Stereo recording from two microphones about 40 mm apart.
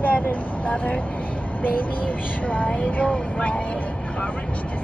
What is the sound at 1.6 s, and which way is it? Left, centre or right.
Speech, left.